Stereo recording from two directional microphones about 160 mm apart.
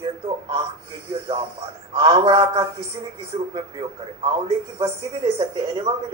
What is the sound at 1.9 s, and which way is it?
A woman's voice, 35° right (ahead or behind).